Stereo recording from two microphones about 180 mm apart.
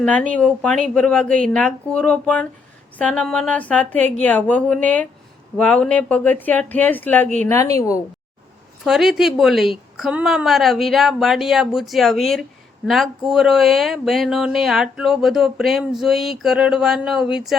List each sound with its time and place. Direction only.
0.0 s speech: 5° left (ahead or behind)
8.8 s speech: centre (ahead or behind)